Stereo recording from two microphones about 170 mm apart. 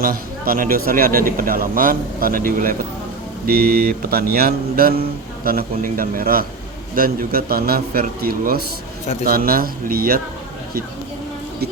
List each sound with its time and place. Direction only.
0.0 s a man's voice: 60° right (ahead or behind)